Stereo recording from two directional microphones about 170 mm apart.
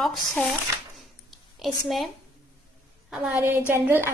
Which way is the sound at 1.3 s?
Centre (ahead or behind).